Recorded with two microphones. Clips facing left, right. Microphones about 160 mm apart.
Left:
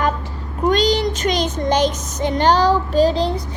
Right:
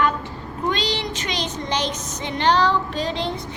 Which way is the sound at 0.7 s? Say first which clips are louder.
Left 10 dB; 45° left (ahead or behind).